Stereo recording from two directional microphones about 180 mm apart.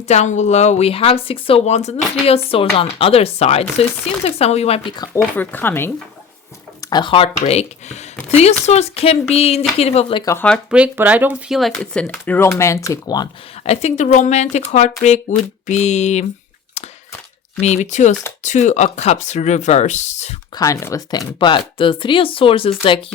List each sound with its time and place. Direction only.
0.1 s speech: 40° left (ahead or behind)
5.1 s speech: 10° left (ahead or behind)
6.9 s speech: 25° left (ahead or behind)
10.2 s speech: 10° left (ahead or behind)
10.7 s speech: 5° right (ahead or behind); by 13.2 s 20° left (ahead or behind)
13.7 s speech: 40° left (ahead or behind)
17.6 s speech: 40° left (ahead or behind)
20.6 s speech: 20° left (ahead or behind)